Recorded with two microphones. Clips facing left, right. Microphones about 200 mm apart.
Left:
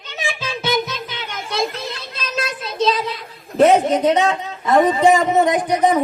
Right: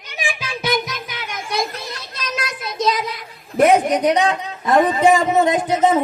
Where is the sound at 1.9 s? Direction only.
25° left (ahead or behind).